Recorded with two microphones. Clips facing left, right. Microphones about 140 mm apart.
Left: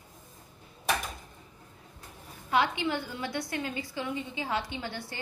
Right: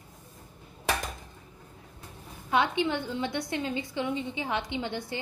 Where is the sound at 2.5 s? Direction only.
20° right (ahead or behind).